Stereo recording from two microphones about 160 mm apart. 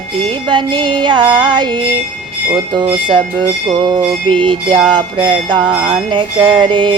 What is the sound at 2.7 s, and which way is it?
Music, 30° right (ahead or behind).